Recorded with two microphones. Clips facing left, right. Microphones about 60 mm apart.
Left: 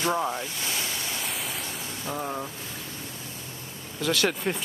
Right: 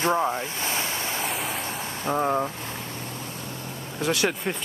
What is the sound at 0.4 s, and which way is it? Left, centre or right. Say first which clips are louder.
Vehicle: right 3 dB; right.